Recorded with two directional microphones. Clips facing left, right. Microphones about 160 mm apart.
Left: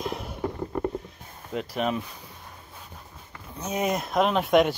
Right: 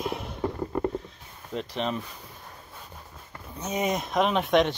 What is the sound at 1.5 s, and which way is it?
Speech, 5° left (ahead or behind).